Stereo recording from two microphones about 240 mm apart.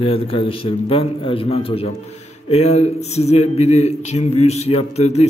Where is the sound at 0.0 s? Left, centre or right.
Left.